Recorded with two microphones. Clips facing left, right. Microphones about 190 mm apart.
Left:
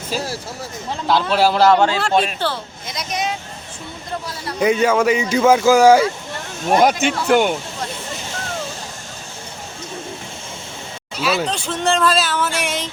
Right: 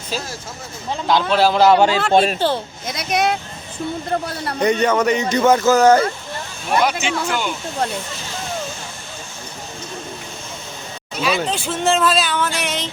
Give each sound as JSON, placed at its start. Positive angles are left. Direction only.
{"t": 1.0, "sound": "speech", "side_deg": 5}
{"t": 1.6, "sound": "a man's voice", "side_deg": -10}
{"t": 2.1, "sound": "speech", "side_deg": -35}
{"t": 2.8, "sound": "speech", "side_deg": -60}
{"t": 4.6, "sound": "speech", "side_deg": 5}
{"t": 6.7, "sound": "speech", "side_deg": 45}
{"t": 7.0, "sound": "speech", "side_deg": 55}
{"t": 7.8, "sound": "speech", "side_deg": -60}
{"t": 11.2, "sound": "speech", "side_deg": 0}